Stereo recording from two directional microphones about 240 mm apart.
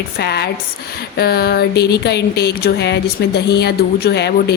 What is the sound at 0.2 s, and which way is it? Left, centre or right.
A woman's voice, left.